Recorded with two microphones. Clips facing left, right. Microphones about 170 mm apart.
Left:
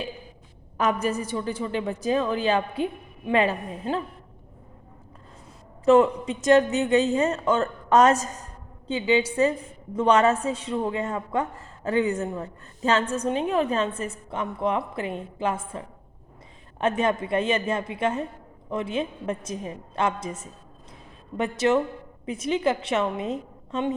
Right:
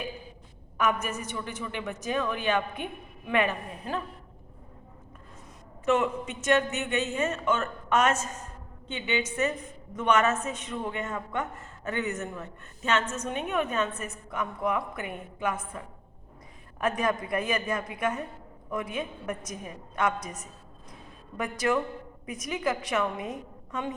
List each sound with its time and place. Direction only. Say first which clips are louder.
0.8 s a woman's voice: left 4 dB; 35° left (ahead or behind)
5.8 s a woman's voice: left 8 dB; 35° left (ahead or behind)